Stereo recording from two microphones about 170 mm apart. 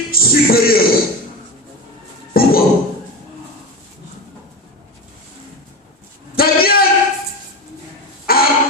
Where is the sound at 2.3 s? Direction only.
60° left (ahead or behind).